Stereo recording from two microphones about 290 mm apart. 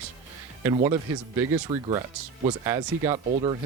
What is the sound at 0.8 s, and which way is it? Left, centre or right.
Speech, centre.